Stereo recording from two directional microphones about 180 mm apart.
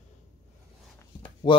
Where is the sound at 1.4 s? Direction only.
25° left (ahead or behind).